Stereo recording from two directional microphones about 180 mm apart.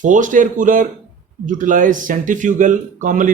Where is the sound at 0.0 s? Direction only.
45° right (ahead or behind).